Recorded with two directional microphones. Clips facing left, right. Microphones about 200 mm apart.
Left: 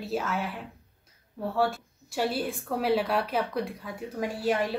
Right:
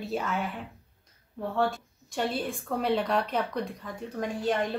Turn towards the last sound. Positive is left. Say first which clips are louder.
# left 1 dB
turn(degrees=5)  # may be behind; listen again after turning